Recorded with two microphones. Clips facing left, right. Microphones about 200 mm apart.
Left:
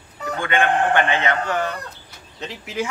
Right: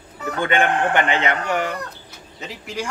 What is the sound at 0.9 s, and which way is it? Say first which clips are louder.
Speech: even; 15° right (ahead or behind).